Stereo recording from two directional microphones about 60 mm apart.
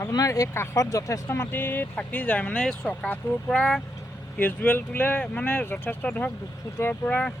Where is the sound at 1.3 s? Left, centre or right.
Left.